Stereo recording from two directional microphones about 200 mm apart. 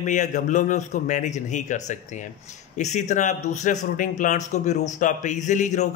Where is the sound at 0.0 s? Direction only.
40° left (ahead or behind).